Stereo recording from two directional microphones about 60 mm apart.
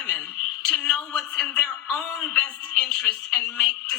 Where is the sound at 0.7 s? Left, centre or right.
Centre.